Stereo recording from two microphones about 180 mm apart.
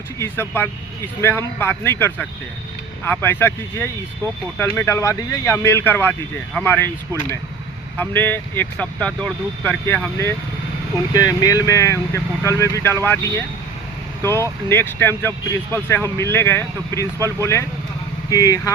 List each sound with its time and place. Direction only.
0.2 s speech: 10° left (ahead or behind)
14.2 s speech: 15° left (ahead or behind)